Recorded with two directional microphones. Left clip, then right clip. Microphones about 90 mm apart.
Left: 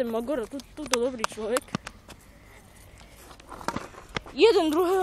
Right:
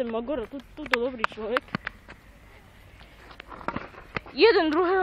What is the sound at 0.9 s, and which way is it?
Speech, 25° left (ahead or behind).